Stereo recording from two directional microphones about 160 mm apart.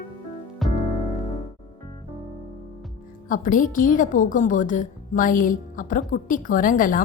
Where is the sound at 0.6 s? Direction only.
Centre (ahead or behind).